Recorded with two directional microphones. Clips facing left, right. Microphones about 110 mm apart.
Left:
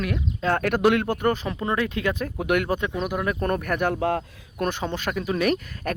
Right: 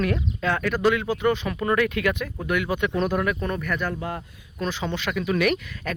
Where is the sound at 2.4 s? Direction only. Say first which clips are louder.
Left 3 dB; 60° left (ahead or behind).